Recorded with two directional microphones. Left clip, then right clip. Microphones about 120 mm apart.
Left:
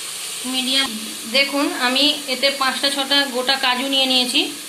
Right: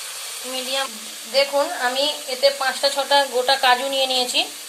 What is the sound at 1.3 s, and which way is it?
Speech, 60° right (ahead or behind).